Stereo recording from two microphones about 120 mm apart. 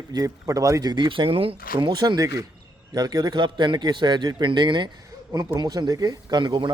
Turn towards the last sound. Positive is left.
turn(degrees=-40)  # may be behind; listen again after turning